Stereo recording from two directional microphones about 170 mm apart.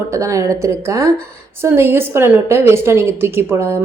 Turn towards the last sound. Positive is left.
turn(degrees=-15)  # may be behind; listen again after turning